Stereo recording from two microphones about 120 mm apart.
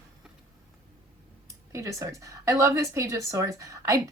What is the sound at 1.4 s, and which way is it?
Speech, 25° right (ahead or behind).